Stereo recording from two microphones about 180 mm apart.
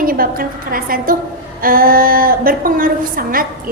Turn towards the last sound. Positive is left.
turn(degrees=-50)  # may be behind; listen again after turning